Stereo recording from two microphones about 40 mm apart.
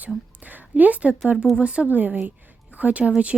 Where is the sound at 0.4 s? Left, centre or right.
Right.